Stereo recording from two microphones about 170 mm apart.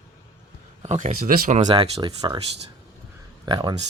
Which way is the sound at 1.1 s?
60° right (ahead or behind).